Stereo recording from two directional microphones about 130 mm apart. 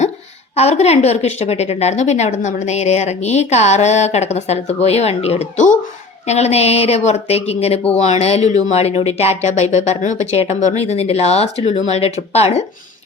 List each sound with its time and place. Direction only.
0.5 s a woman's voice: 55° left (ahead or behind)